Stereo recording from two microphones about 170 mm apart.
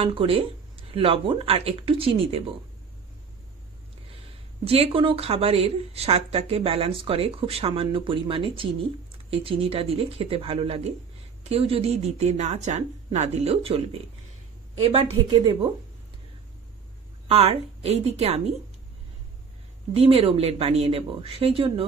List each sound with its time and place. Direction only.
0.0 s a woman's voice: 30° right (ahead or behind)
4.6 s a woman's voice: 35° right (ahead or behind)
17.3 s a woman's voice: 35° right (ahead or behind)
19.9 s a woman's voice: 35° right (ahead or behind)